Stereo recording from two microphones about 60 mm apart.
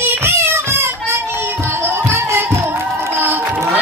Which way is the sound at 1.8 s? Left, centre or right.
Right.